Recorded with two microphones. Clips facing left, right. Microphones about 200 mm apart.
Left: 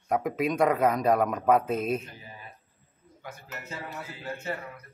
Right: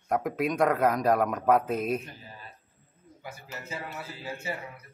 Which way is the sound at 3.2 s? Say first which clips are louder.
Even; 10° right (ahead or behind).